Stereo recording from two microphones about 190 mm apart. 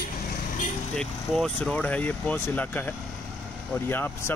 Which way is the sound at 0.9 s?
5° left (ahead or behind).